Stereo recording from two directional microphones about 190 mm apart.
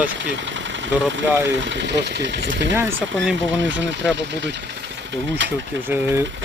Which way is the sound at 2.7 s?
10° right (ahead or behind).